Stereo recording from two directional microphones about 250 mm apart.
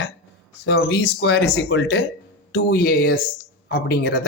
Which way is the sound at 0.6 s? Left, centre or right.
Left.